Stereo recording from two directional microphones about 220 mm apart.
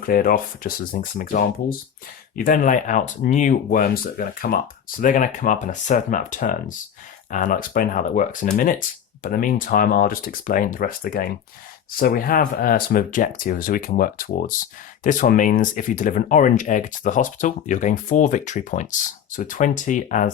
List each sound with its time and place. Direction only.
0.0 s speech: 40° left (ahead or behind)